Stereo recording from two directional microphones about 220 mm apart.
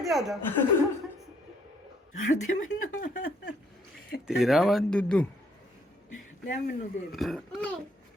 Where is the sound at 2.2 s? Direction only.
35° left (ahead or behind).